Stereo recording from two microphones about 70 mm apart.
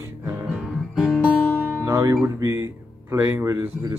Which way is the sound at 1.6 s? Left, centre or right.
Right.